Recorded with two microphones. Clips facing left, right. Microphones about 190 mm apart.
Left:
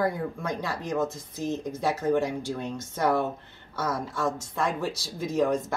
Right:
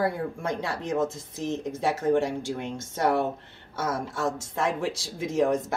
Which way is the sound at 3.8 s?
25° right (ahead or behind).